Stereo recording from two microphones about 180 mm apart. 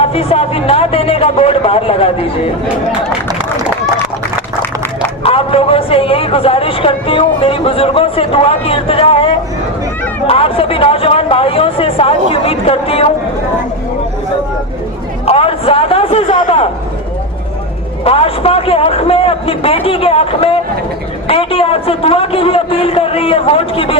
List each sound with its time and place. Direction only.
0.0 s a man's voice: 35° left (ahead or behind)
5.2 s a man's voice: 30° left (ahead or behind)
15.3 s a man's voice: 30° left (ahead or behind)
18.0 s a man's voice: 30° left (ahead or behind)